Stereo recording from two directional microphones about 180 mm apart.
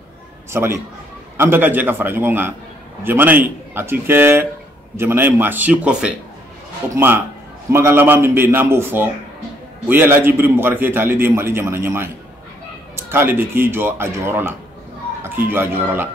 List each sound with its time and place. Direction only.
0.5 s a man's voice: 15° right (ahead or behind)